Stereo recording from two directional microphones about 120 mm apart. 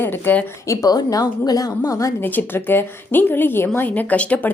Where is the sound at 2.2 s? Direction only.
15° left (ahead or behind).